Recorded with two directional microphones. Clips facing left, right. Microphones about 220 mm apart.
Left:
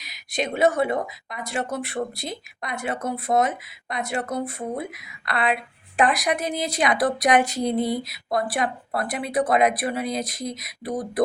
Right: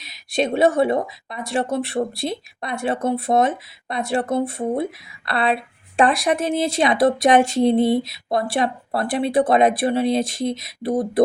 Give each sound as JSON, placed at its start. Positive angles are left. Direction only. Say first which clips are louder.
{"t": 0.0, "sound": "speech", "louder": "right 6 dB", "side_deg": -25}